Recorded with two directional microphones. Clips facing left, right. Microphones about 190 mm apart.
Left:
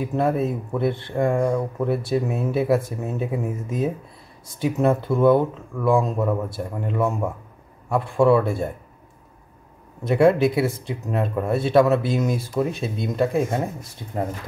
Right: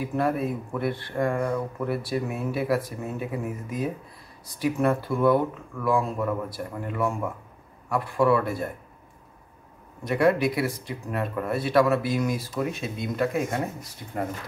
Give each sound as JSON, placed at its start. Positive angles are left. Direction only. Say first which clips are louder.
{"t": 0.1, "sound": "speech", "louder": "left 4 dB", "side_deg": 25}
{"t": 1.3, "sound": "speech", "louder": "left 5 dB", "side_deg": 10}
{"t": 1.9, "sound": "speech", "louder": "left 5 dB", "side_deg": 25}
{"t": 10.0, "sound": "speech", "louder": "left 5 dB", "side_deg": 25}